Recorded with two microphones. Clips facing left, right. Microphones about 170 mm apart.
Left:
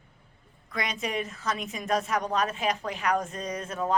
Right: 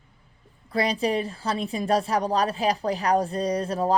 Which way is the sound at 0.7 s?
35° right (ahead or behind).